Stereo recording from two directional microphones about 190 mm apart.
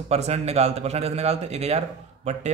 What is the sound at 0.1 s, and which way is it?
Speech, 35° right (ahead or behind).